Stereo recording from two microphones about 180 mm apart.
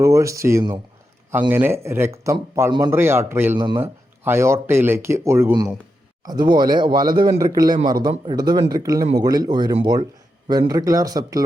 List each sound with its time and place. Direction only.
0.0 s speech: 15° right (ahead or behind)